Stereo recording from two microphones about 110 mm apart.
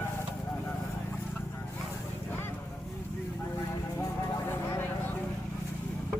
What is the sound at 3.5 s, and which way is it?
Vehicle, 30° left (ahead or behind).